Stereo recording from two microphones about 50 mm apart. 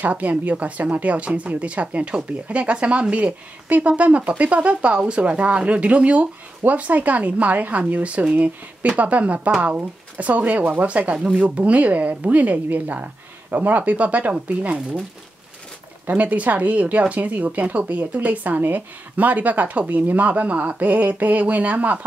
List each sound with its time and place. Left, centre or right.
0.0 s speech: right
16.1 s speech: right